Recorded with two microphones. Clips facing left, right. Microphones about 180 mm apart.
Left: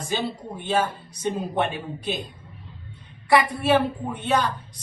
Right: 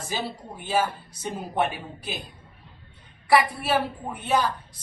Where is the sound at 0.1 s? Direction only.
5° right (ahead or behind).